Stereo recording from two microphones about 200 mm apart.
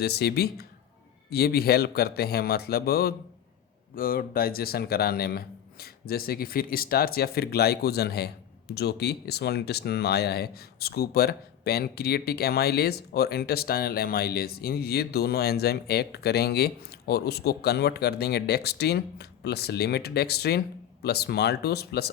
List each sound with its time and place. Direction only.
0.0 s speech: 55° left (ahead or behind)